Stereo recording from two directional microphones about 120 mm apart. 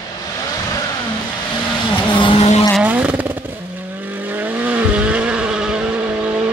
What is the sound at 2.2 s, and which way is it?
Vehicle, 45° left (ahead or behind).